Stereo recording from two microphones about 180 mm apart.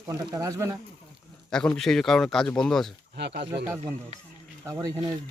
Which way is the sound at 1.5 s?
5° left (ahead or behind).